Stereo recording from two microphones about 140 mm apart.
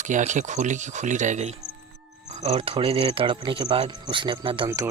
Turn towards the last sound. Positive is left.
turn(degrees=-20)  # may be behind; listen again after turning